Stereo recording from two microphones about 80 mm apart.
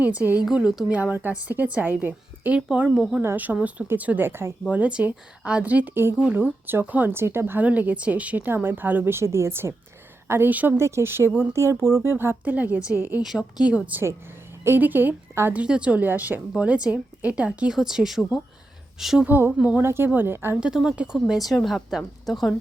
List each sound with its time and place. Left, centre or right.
0.0 s speech: centre
0.4 s speech: centre
0.9 s speech: centre
2.9 s speech: centre
3.2 s speech: right
4.7 s a woman's voice: centre; by 10.5 s right
10.5 s speech: centre
10.8 s speech: right
15.6 s speech: centre
19.2 s speech: right
19.8 s speech: right
20.6 s speech: centre